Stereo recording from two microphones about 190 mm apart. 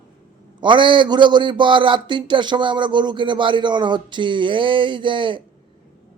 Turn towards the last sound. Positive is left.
turn(degrees=-25)  # may be behind; listen again after turning